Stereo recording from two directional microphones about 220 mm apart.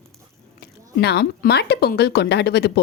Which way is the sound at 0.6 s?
50° left (ahead or behind).